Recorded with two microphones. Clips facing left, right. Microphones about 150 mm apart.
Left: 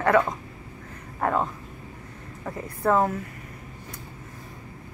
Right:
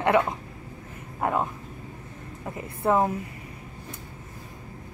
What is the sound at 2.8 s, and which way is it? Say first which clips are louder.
Speech: left 1 dB; 15° right (ahead or behind).